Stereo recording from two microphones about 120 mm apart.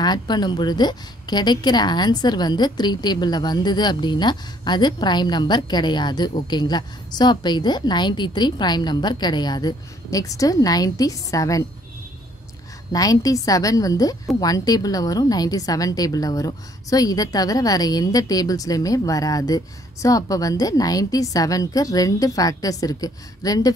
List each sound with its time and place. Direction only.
0.0 s a woman's voice: 35° left (ahead or behind)
12.9 s a woman's voice: 30° left (ahead or behind)